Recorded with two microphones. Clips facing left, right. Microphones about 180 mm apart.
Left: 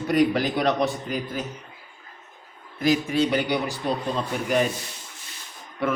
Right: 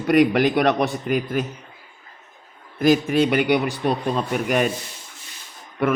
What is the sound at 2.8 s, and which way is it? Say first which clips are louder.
Speech: right 4 dB; 55° right (ahead or behind).